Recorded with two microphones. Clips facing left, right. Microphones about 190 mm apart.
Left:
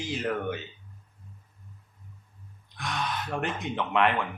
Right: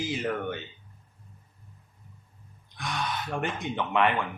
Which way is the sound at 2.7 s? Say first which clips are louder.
Even; centre (ahead or behind).